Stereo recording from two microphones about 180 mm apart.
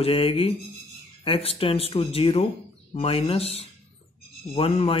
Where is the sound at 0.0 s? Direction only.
30° left (ahead or behind).